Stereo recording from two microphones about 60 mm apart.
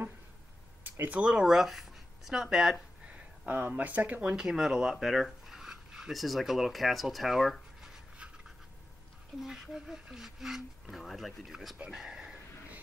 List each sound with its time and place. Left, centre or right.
1.0 s speech: right
1.4 s speech: centre
3.1 s speech: right
4.4 s speech: centre
9.4 s speech: centre